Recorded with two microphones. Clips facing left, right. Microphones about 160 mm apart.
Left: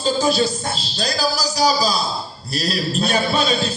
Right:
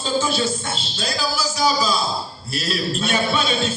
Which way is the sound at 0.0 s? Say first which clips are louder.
Left 3 dB; 35° left (ahead or behind).